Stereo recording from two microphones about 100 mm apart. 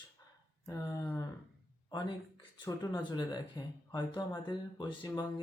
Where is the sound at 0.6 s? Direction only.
35° left (ahead or behind).